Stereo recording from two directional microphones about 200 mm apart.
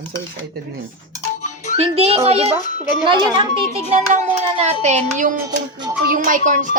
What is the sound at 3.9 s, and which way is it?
Child singing, 35° right (ahead or behind).